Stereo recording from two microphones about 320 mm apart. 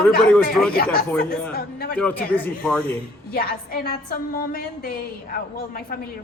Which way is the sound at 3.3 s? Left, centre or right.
Left.